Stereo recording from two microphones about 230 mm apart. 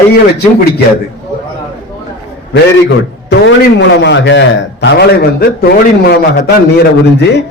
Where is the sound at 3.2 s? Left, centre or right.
Left.